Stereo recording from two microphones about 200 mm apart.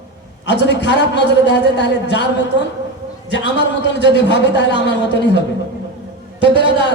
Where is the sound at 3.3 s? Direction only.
60° left (ahead or behind).